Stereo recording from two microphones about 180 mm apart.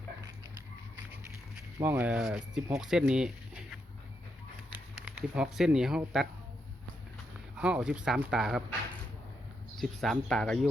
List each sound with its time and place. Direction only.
1.1 s speech: 10° right (ahead or behind)
4.9 s speech: 5° right (ahead or behind)
7.5 s speech: 5° right (ahead or behind)
9.7 s speech: centre (ahead or behind)